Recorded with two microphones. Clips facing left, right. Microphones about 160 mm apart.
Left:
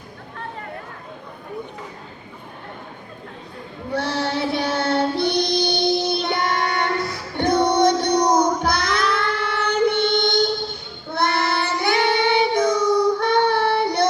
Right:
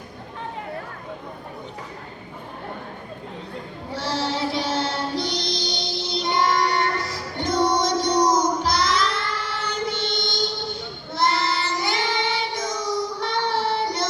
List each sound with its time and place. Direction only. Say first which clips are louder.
3.9 s child singing: left 3 dB; 60° left (ahead or behind)